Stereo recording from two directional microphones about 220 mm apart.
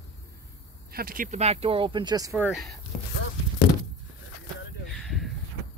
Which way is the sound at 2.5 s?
Centre (ahead or behind).